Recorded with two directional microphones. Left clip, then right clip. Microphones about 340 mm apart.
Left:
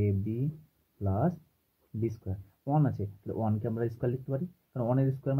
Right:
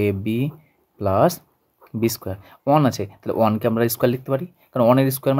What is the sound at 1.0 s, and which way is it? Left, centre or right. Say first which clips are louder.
Speech: right 15 dB; right.